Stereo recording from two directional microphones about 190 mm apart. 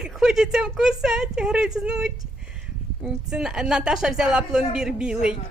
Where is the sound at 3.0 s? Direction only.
5° right (ahead or behind).